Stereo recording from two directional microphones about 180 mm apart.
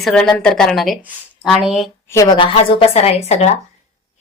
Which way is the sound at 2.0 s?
15° left (ahead or behind).